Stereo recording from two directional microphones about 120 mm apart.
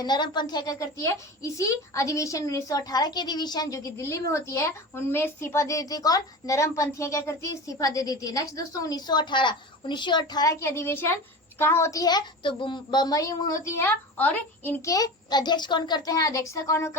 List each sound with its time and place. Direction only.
0.0 s a child's voice: 35° left (ahead or behind); by 14.8 s 15° left (ahead or behind)
14.8 s a child's voice: 30° left (ahead or behind)